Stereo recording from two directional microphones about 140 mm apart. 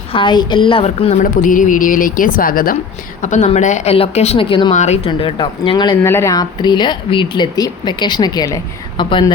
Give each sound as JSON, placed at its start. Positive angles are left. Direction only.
{"t": 0.1, "sound": "speech", "side_deg": 35}
{"t": 1.2, "sound": "a woman's voice", "side_deg": 70}
{"t": 3.2, "sound": "a woman's voice", "side_deg": 60}
{"t": 3.9, "sound": "speech", "side_deg": 45}
{"t": 4.7, "sound": "speech", "side_deg": 55}
{"t": 6.0, "sound": "speech", "side_deg": 20}